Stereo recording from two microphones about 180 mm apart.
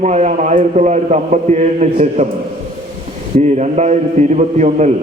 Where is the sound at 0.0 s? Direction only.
40° right (ahead or behind).